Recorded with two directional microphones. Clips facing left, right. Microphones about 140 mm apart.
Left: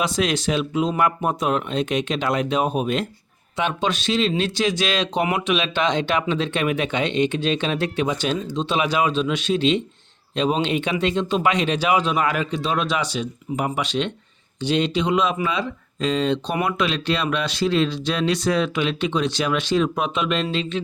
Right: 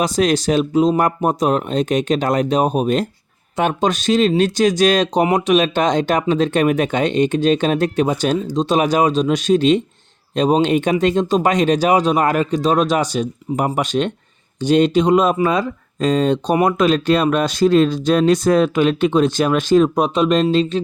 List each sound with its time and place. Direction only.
0.0 s speech: 40° right (ahead or behind)